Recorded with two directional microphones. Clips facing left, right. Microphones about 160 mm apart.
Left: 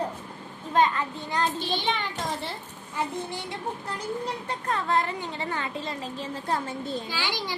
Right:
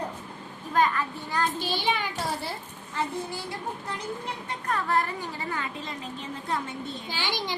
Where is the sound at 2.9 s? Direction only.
20° left (ahead or behind); by 6.7 s 35° left (ahead or behind).